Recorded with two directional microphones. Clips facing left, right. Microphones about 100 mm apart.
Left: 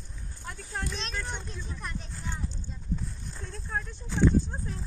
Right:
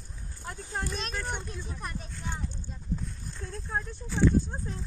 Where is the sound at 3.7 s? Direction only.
10° right (ahead or behind).